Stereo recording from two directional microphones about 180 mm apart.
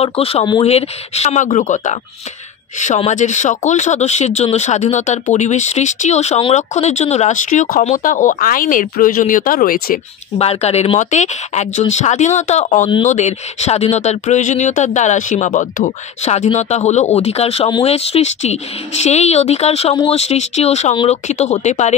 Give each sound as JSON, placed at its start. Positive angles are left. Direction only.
{"t": 0.0, "sound": "speech", "side_deg": 30}
{"t": 10.4, "sound": "speech", "side_deg": 35}